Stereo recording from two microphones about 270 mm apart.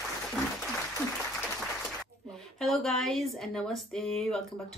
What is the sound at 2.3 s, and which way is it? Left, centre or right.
Speech, centre.